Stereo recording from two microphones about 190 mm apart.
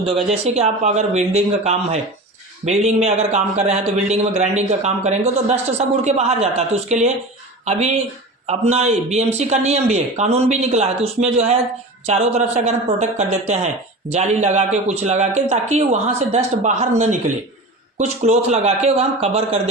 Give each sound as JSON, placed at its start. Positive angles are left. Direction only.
{"t": 0.0, "sound": "a man's voice", "side_deg": -35}